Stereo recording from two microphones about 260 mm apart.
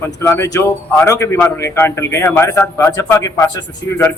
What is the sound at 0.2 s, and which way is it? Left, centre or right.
A man's voice, centre.